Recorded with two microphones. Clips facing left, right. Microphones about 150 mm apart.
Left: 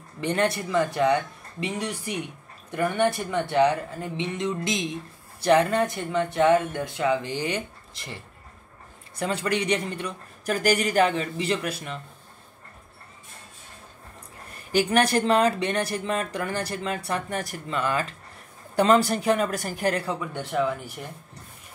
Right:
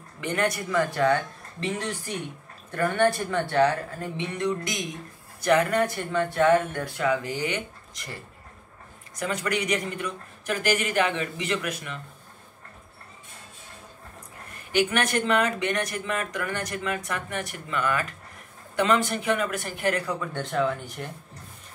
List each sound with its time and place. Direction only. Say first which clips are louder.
0.2 s speech: left 2 dB; 30° left (ahead or behind)
14.7 s speech: left 3 dB; 35° left (ahead or behind)
20.1 s speech: even; 15° left (ahead or behind)